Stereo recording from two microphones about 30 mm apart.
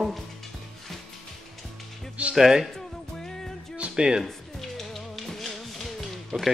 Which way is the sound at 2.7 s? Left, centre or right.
Centre.